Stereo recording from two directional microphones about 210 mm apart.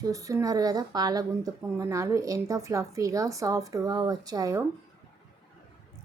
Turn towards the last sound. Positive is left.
turn(degrees=-15)  # may be behind; listen again after turning